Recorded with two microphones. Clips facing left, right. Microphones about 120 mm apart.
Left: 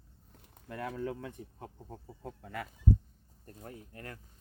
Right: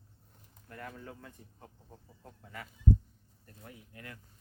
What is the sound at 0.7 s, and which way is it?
Speech, 90° left.